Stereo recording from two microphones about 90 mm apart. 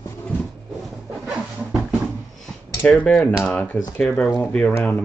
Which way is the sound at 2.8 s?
15° left (ahead or behind).